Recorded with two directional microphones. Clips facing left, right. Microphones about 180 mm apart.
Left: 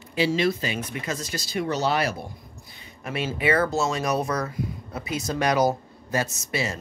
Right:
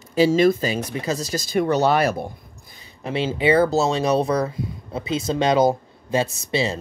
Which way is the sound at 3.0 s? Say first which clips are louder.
Right 5 dB; 30° right (ahead or behind).